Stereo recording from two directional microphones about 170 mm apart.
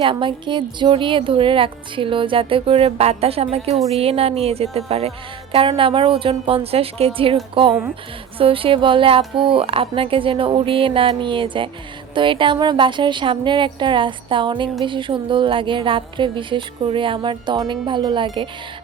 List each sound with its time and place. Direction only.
0.0 s a woman's voice: 30° right (ahead or behind)